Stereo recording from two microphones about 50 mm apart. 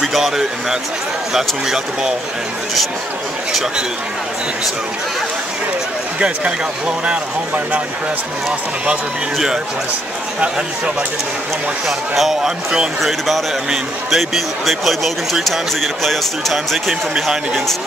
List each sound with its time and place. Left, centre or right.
0.0 s speech: centre
6.1 s speech: right
12.2 s speech: centre